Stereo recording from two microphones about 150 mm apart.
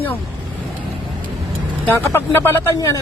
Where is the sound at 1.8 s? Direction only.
15° left (ahead or behind).